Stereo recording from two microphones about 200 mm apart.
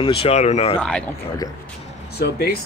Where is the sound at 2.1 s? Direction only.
55° left (ahead or behind).